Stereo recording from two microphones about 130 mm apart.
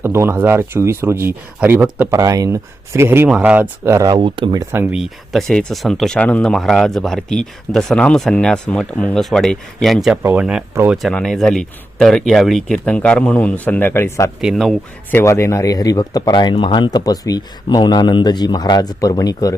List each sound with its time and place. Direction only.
0.0 s speech: 20° right (ahead or behind)
2.0 s speech: 25° right (ahead or behind)
3.2 s speech: 10° right (ahead or behind)
3.9 s speech: 30° right (ahead or behind)
4.6 s speech: 15° right (ahead or behind)
4.9 s speech: centre (ahead or behind)
10.9 s speech: 5° left (ahead or behind)
14.4 s speech: centre (ahead or behind)
15.1 s speech: 20° left (ahead or behind)